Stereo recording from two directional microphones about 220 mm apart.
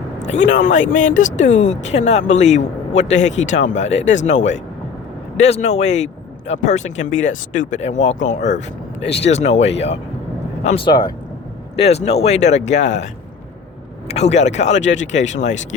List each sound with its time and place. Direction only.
0.2 s speech: 35° left (ahead or behind)
3.8 s speech: 55° left (ahead or behind)
4.1 s speech: 35° left (ahead or behind)
5.4 s speech: 30° left (ahead or behind)
14.1 s speech: 30° left (ahead or behind)